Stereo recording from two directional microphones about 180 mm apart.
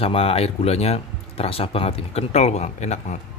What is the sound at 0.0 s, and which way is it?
Speech, 30° left (ahead or behind).